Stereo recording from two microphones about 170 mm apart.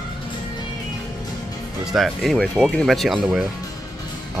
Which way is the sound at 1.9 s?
Centre (ahead or behind).